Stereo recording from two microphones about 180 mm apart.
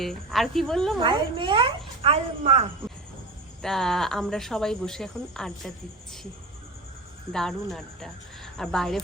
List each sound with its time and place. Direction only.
0.0 s speech: centre (ahead or behind)
1.0 s speech: 25° right (ahead or behind)
3.6 s speech: centre (ahead or behind)
7.3 s speech: centre (ahead or behind)